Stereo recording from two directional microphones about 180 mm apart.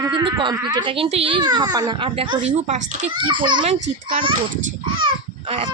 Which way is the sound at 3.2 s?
25° right (ahead or behind).